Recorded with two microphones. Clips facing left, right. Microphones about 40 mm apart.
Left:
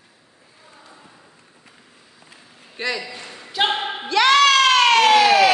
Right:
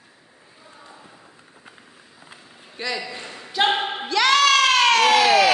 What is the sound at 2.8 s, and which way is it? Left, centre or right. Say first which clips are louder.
Speech: left 3 dB; left.